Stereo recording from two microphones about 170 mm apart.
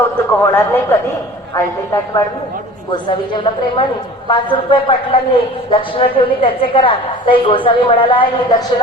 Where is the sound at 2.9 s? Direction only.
30° left (ahead or behind).